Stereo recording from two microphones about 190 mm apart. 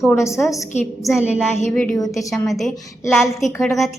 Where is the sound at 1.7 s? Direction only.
5° left (ahead or behind).